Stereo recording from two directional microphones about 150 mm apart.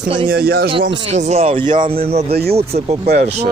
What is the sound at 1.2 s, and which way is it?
Speech, 45° right (ahead or behind).